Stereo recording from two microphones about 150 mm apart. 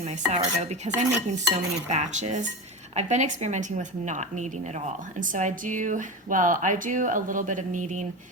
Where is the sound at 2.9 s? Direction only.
50° right (ahead or behind).